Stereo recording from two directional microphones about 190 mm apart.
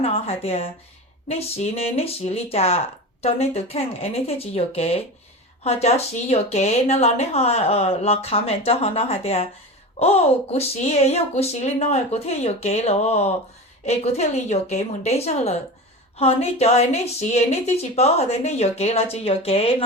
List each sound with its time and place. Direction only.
0.0 s speech: 30° left (ahead or behind)